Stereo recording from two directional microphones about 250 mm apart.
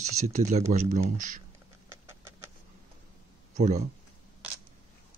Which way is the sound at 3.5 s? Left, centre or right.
Right.